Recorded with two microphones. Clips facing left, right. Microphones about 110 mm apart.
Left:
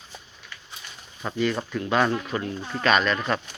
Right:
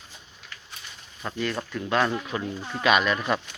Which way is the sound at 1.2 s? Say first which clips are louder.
Left 4 dB; centre (ahead or behind).